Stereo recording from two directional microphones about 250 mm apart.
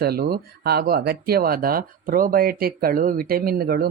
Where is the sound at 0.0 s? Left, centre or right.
Right.